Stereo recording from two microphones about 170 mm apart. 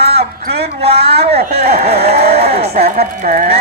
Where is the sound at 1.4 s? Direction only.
65° right (ahead or behind).